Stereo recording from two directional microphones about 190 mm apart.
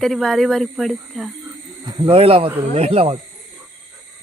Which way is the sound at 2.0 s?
30° right (ahead or behind).